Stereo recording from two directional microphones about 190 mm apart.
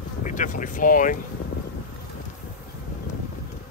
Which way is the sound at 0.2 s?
45° left (ahead or behind).